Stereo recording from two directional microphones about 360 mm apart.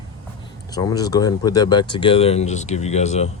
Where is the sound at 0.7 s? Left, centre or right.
Centre.